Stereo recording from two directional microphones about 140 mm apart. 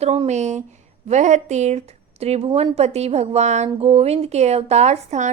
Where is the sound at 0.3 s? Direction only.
55° right (ahead or behind).